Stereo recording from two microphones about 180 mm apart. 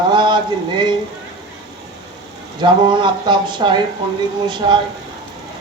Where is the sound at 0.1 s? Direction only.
25° right (ahead or behind).